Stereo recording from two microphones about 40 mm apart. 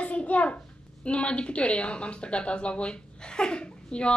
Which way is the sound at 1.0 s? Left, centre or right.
Left.